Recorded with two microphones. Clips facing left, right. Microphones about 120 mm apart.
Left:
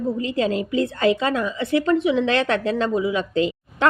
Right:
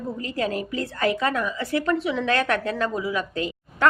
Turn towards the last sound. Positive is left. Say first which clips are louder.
# left 7 dB
turn(degrees=25)  # may be behind; listen again after turning